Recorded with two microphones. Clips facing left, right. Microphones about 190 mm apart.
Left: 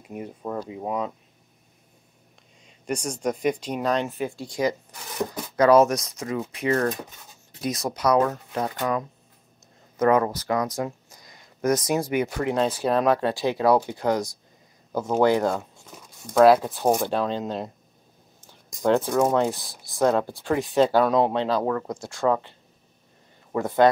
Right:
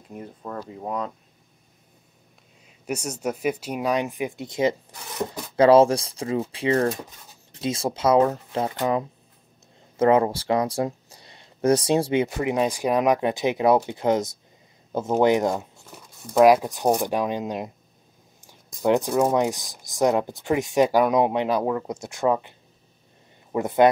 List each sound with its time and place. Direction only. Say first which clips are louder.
0.1 s speech: left 3 dB; 10° left (ahead or behind)
2.6 s speech: left 1 dB; 5° right (ahead or behind)
15.9 s crumpling: right 1 dB; 5° right (ahead or behind)
16.4 s speech: even; 15° right (ahead or behind)
18.4 s a sound: even; 10° right (ahead or behind)
19.3 s speech: even; 15° right (ahead or behind)